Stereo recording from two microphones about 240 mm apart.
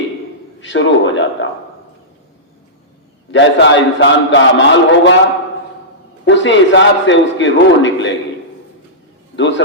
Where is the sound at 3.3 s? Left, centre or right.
Left.